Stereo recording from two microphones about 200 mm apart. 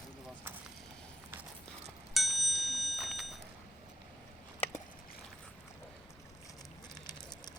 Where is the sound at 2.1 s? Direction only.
Centre (ahead or behind).